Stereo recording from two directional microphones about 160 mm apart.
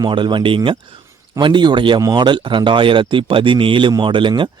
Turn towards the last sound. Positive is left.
turn(degrees=-30)  # may be behind; listen again after turning